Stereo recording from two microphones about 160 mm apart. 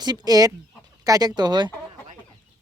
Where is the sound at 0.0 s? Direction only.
25° right (ahead or behind).